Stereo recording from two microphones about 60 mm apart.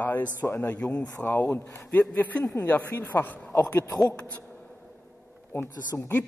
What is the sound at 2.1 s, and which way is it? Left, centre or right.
A man's voice, left.